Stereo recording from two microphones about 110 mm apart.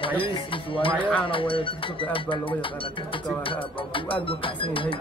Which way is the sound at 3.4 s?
55° left (ahead or behind).